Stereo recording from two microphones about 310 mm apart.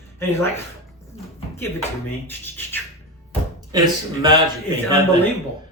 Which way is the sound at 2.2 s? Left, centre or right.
Centre.